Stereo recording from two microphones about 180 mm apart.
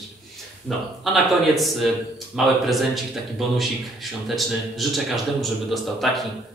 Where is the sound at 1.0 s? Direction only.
Centre (ahead or behind).